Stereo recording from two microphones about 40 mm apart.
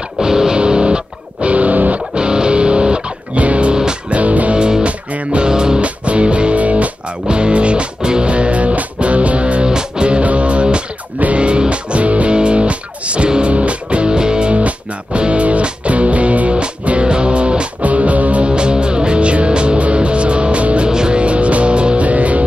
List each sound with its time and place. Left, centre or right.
0.2 s music: centre; by 2.0 s right
2.1 s music: right
4.6 s music: centre
4.8 s music: right
5.5 s music: centre
5.8 s music: right
6.5 s music: right
7.2 s music: right
17.8 s music: right